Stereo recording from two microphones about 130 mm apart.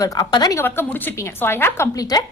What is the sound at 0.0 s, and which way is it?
Speech, 30° left (ahead or behind).